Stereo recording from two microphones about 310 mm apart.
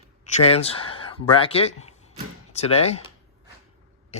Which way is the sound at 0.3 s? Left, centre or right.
Left.